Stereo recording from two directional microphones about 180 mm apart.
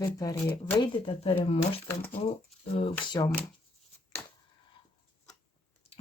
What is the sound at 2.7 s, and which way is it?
Speech, 30° left (ahead or behind).